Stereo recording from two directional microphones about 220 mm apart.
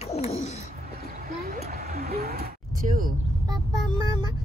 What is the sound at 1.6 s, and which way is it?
Music, 35° right (ahead or behind).